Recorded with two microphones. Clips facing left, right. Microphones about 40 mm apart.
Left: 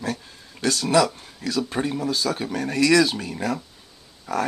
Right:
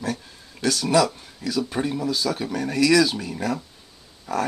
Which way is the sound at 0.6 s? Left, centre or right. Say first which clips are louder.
Even; left.